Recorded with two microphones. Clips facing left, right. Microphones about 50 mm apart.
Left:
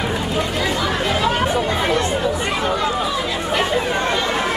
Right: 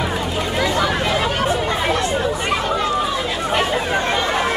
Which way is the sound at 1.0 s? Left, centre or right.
Centre.